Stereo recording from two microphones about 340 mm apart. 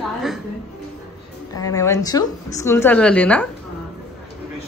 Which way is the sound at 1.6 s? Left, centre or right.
Centre.